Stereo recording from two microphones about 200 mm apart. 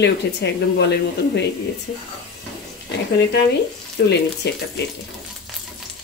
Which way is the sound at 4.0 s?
55° left (ahead or behind).